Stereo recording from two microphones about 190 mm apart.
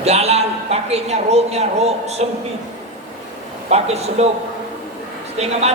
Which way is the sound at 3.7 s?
35° right (ahead or behind).